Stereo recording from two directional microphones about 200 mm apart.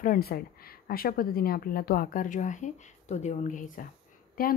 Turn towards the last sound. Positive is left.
turn(degrees=45)  # may be behind; listen again after turning